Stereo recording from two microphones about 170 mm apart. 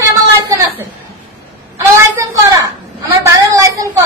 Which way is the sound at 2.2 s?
20° right (ahead or behind).